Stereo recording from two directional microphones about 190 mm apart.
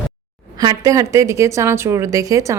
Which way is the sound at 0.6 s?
20° right (ahead or behind).